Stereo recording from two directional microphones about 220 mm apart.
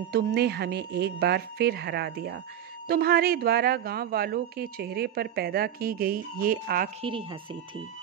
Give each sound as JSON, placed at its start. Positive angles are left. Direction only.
{"t": 0.1, "sound": "speech", "side_deg": -45}
{"t": 7.0, "sound": "speech", "side_deg": -25}